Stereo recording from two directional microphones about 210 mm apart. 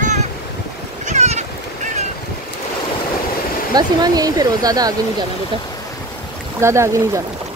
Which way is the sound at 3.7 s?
20° right (ahead or behind).